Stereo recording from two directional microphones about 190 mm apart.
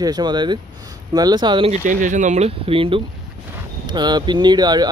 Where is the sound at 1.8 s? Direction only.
40° right (ahead or behind).